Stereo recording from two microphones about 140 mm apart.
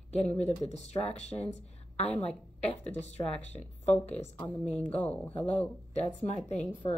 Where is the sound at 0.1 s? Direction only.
50° left (ahead or behind).